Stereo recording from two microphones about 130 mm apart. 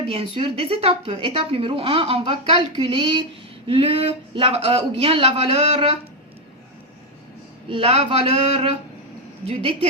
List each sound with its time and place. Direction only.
0.1 s a woman's voice: 45° right (ahead or behind)
7.7 s a woman's voice: 45° right (ahead or behind)